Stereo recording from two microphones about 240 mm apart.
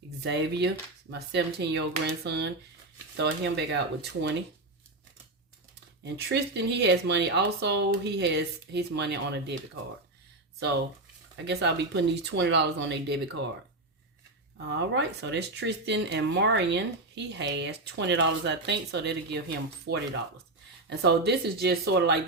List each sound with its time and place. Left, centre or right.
0.2 s speech: right
6.2 s speech: right
11.4 s speech: right
14.7 s speech: right